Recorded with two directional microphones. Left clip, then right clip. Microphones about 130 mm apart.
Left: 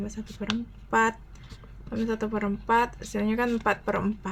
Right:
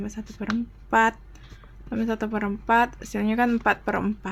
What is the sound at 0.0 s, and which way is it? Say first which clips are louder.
Speech: right 2 dB; 45° right (ahead or behind).